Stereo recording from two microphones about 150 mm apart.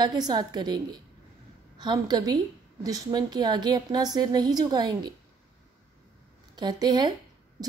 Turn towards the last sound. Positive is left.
turn(degrees=-30)  # may be behind; listen again after turning